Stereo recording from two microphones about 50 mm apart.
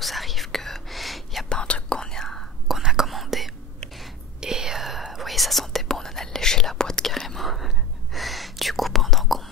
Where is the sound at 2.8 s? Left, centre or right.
Centre.